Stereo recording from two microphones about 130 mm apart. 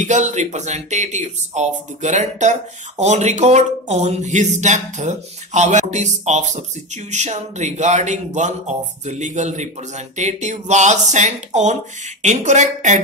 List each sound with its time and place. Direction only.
0.0 s a man's voice: 65° right (ahead or behind)